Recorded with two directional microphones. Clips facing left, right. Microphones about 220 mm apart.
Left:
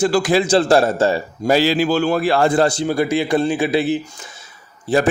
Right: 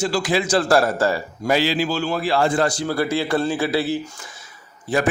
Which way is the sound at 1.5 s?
45° left (ahead or behind).